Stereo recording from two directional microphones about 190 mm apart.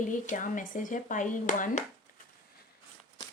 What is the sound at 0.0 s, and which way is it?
Speech, 40° left (ahead or behind).